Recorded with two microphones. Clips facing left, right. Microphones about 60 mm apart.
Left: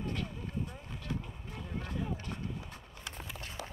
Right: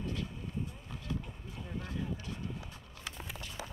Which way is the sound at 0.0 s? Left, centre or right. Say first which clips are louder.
Left 1 dB; left.